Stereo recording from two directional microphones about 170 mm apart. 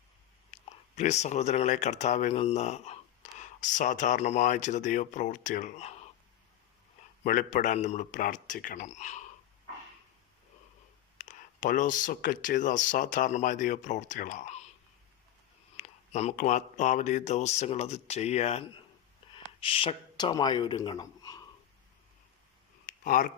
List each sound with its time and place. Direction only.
0.5 s speech: 40° left (ahead or behind)
7.3 s speech: 50° left (ahead or behind)
11.2 s speech: 50° left (ahead or behind)
15.8 s speech: 45° left (ahead or behind); by 21.4 s 20° left (ahead or behind)
22.9 s a sound: 50° left (ahead or behind)